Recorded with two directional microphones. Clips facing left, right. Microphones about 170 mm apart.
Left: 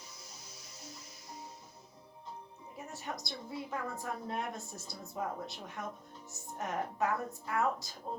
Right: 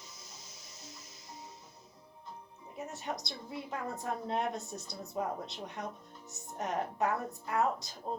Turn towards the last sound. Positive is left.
turn(degrees=-20)  # may be behind; listen again after turning